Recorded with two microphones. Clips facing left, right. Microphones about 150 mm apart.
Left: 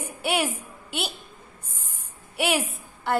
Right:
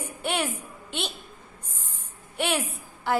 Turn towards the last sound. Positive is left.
turn(degrees=5)  # may be behind; listen again after turning